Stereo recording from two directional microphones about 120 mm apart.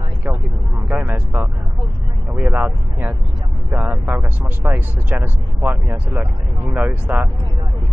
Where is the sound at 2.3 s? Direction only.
15° right (ahead or behind).